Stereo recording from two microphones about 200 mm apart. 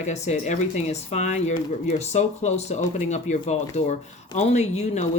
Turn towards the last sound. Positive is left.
turn(degrees=35)  # may be behind; listen again after turning